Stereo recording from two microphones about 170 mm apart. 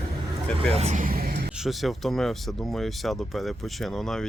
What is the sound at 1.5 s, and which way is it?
Speech, centre (ahead or behind).